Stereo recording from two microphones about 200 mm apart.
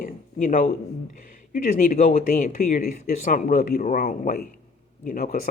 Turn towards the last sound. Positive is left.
turn(degrees=45)  # may be behind; listen again after turning